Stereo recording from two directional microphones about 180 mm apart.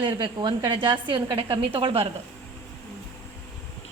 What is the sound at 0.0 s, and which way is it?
A woman's voice, 25° right (ahead or behind).